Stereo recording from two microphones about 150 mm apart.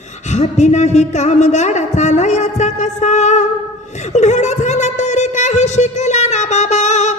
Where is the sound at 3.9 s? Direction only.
50° left (ahead or behind).